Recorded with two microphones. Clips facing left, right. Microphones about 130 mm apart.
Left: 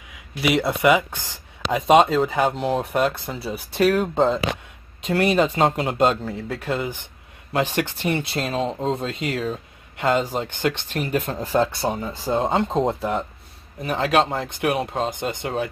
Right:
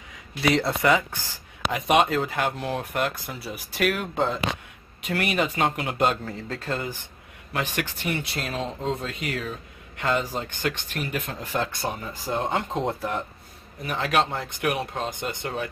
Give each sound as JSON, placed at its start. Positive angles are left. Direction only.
{"t": 0.4, "sound": "speech", "side_deg": 15}
{"t": 6.2, "sound": "a man's voice", "side_deg": 10}
{"t": 10.9, "sound": "speech", "side_deg": 35}